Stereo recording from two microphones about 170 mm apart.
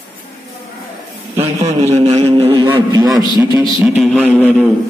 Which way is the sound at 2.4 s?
15° right (ahead or behind).